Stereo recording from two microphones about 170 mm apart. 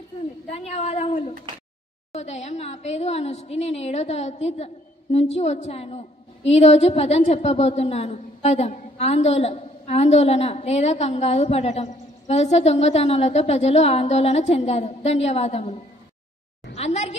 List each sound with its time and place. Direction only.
0.5 s a woman's voice: 40° left (ahead or behind)
2.1 s a woman's voice: 40° left (ahead or behind)
16.7 s a woman's voice: 40° left (ahead or behind)